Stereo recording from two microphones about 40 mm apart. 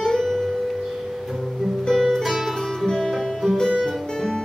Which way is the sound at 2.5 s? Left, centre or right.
Centre.